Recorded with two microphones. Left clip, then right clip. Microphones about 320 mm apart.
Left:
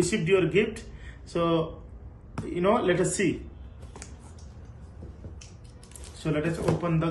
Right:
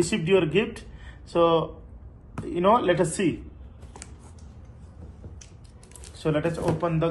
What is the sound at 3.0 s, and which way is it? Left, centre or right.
Speech, centre.